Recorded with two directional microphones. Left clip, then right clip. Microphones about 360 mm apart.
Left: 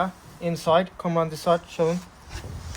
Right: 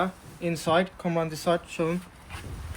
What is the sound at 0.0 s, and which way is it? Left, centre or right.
Speech, centre.